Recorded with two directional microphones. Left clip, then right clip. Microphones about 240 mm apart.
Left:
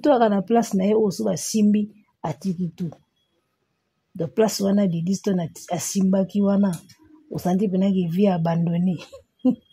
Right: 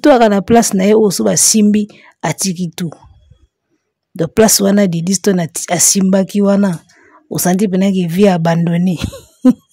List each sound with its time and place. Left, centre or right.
0.0 s a woman's voice: right
4.2 s a woman's voice: right